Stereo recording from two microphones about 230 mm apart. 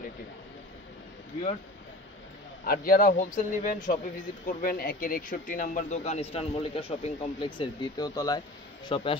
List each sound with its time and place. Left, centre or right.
2.6 s a man's voice: left